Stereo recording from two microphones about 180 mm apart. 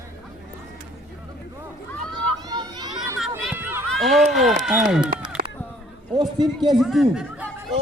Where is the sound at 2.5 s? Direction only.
20° right (ahead or behind).